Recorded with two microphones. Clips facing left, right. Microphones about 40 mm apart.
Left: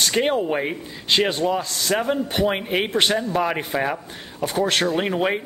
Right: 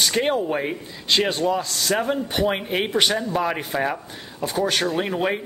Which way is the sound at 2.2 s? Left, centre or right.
Centre.